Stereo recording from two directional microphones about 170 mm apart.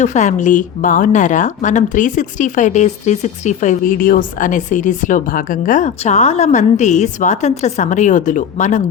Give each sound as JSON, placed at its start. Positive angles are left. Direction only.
{"t": 0.0, "sound": "speech", "side_deg": 45}